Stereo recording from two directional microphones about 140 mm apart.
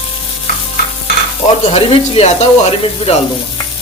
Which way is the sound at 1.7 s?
45° left (ahead or behind).